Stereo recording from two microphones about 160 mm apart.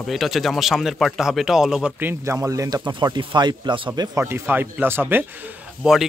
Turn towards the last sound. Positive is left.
turn(degrees=-5)  # may be behind; listen again after turning